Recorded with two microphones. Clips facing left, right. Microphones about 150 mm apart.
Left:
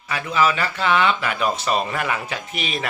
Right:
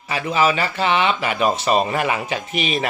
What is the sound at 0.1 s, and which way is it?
A man's voice, 25° right (ahead or behind).